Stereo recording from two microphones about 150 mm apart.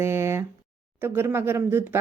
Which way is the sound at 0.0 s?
20° right (ahead or behind).